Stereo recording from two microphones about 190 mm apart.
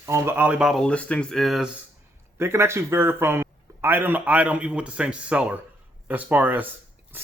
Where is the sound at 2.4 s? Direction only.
15° right (ahead or behind).